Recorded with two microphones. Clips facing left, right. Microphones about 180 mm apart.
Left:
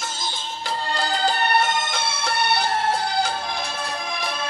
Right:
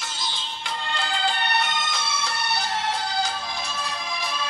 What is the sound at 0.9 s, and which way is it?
Music, 40° left (ahead or behind).